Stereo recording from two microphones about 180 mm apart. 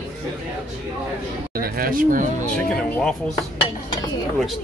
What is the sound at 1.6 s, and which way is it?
Speech, 55° right (ahead or behind).